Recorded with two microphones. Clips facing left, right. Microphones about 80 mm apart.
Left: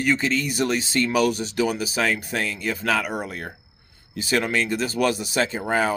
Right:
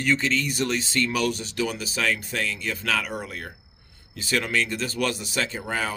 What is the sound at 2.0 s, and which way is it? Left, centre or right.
Speech, left.